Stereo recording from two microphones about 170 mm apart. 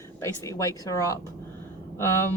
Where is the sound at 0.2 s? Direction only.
20° left (ahead or behind).